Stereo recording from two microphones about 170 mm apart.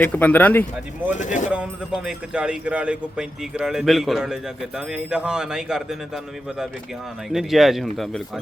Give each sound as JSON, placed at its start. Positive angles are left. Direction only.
{"t": 0.0, "sound": "speech", "side_deg": 10}
{"t": 1.1, "sound": "speech", "side_deg": 45}
{"t": 1.5, "sound": "speech", "side_deg": -5}
{"t": 7.3, "sound": "speech", "side_deg": 0}